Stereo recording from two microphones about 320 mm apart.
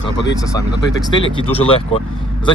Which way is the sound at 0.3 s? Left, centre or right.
Centre.